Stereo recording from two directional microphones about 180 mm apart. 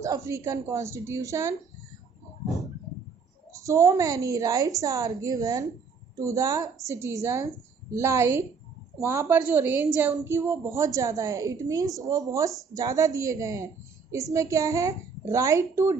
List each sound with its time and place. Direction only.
0.0 s a woman's voice: 15° right (ahead or behind)
3.5 s a woman's voice: 15° right (ahead or behind)